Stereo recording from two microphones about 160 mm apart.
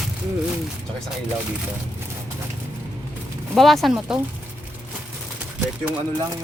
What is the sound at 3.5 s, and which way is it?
Speech, centre (ahead or behind).